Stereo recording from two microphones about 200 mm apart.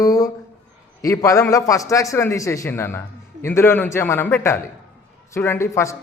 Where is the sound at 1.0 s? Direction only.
15° left (ahead or behind).